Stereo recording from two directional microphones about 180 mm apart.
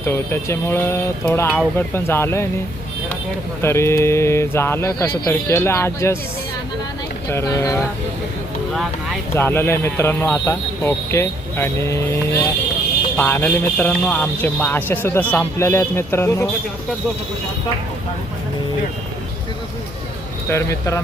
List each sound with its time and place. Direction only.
0.0 s speech: 15° left (ahead or behind)
3.6 s speech: 15° left (ahead or behind)
7.3 s speech: 15° left (ahead or behind)
8.7 s speech: centre (ahead or behind)
9.3 s speech: 10° left (ahead or behind)
20.5 s speech: 15° left (ahead or behind)